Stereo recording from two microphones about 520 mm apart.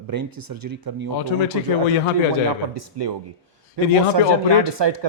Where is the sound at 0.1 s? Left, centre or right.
Right.